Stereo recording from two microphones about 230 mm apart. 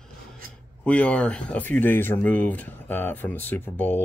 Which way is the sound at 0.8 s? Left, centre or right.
Centre.